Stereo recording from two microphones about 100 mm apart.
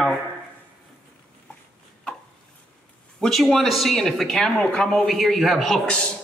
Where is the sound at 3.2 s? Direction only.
Centre (ahead or behind).